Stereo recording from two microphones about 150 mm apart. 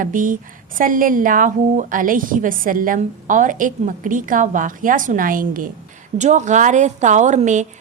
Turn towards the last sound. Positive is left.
turn(degrees=-55)  # may be behind; listen again after turning